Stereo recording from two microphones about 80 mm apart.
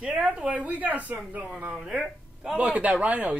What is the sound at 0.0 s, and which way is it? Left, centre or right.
Speech, centre.